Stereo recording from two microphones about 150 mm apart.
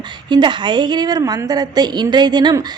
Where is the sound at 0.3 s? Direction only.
30° right (ahead or behind).